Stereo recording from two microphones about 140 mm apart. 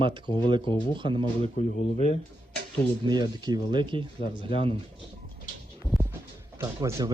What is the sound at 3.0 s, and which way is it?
Speech, 35° right (ahead or behind).